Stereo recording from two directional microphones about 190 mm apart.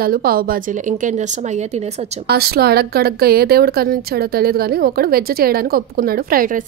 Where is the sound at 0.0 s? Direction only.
50° right (ahead or behind).